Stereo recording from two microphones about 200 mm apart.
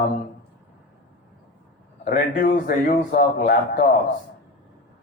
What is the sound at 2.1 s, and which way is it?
Speech, 45° left (ahead or behind).